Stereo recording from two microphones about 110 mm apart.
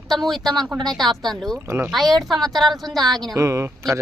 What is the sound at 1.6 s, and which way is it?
Speech, 25° right (ahead or behind).